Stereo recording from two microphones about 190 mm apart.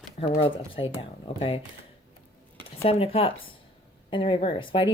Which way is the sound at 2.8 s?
30° left (ahead or behind).